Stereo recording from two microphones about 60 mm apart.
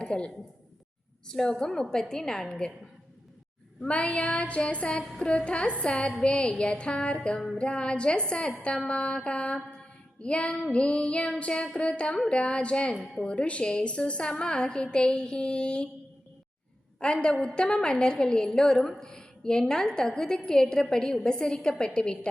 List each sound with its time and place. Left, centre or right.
0.0 s a man's voice: centre
1.3 s a woman's voice: centre
3.8 s a sound: centre
5.5 s a woman's voice: centre
17.0 s a woman's voice: centre